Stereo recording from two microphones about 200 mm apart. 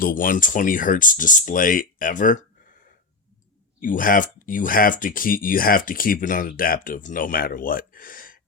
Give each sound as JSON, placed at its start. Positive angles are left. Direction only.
{"t": 0.0, "sound": "speech", "side_deg": 45}
{"t": 3.8, "sound": "speech", "side_deg": 40}